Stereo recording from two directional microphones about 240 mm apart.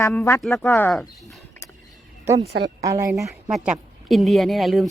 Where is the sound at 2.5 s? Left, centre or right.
Right.